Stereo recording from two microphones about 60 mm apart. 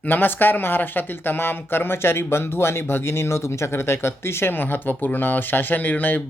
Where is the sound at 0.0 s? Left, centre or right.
Left.